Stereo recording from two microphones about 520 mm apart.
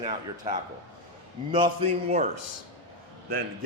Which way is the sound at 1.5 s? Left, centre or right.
Centre.